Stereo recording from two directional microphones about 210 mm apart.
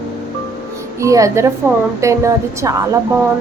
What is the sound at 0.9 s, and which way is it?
A woman's voice, 15° right (ahead or behind).